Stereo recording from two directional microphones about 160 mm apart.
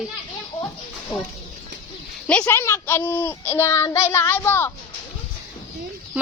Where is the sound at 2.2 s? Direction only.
10° left (ahead or behind).